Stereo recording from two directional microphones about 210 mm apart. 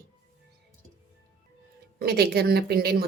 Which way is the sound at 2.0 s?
50° right (ahead or behind).